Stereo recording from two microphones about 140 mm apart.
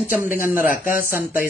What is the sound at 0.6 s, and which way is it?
Speech, 75° left (ahead or behind).